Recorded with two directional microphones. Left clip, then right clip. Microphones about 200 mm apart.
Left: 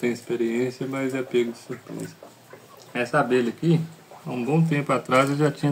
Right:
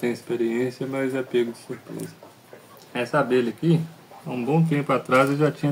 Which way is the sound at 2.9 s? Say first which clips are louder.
Even; 5° left (ahead or behind).